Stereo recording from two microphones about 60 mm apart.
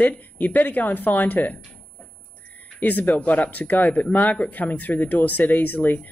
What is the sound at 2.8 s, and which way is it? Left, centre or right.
A woman's voice, left.